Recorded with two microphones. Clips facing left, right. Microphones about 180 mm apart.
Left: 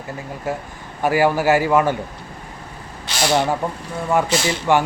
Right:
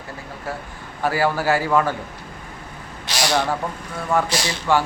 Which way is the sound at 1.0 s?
15° left (ahead or behind).